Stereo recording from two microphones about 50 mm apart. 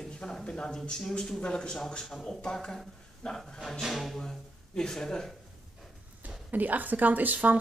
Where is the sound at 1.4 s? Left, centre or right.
Centre.